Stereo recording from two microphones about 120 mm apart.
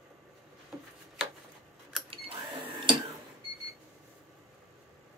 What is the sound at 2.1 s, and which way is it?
Cash register, 50° right (ahead or behind).